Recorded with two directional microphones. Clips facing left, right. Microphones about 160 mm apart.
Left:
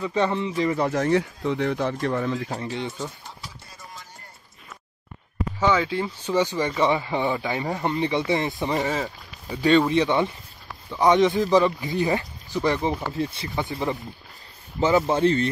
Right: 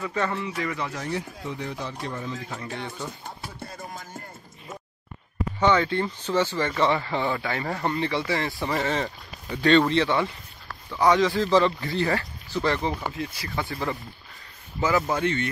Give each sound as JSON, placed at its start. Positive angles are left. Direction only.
{"t": 0.0, "sound": "speech", "side_deg": 20}
{"t": 0.7, "sound": "speech", "side_deg": 40}
{"t": 0.9, "sound": "speech", "side_deg": 70}
{"t": 2.3, "sound": "speech", "side_deg": 30}
{"t": 3.3, "sound": "music", "side_deg": -55}
{"t": 5.6, "sound": "speech", "side_deg": 5}
{"t": 13.1, "sound": "speech", "side_deg": 30}
{"t": 13.6, "sound": "speech", "side_deg": 20}